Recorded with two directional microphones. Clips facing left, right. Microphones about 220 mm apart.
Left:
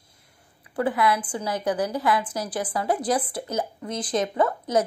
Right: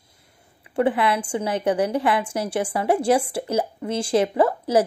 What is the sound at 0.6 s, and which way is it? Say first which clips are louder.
A woman's voice: right 3 dB; 25° right (ahead or behind).